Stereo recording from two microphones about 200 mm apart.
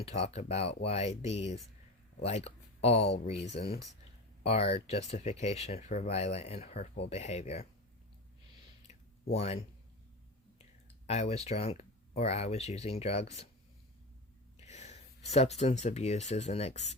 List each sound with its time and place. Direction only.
0.0 s speech: 30° left (ahead or behind)
8.9 s a sound: 30° left (ahead or behind)
11.0 s speech: 30° left (ahead or behind)
14.6 s speech: 35° left (ahead or behind)